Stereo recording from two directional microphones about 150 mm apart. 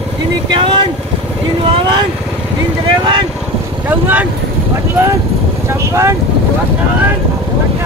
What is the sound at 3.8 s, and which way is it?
Speech, 10° right (ahead or behind).